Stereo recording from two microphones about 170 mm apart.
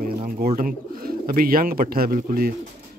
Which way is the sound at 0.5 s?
55° right (ahead or behind).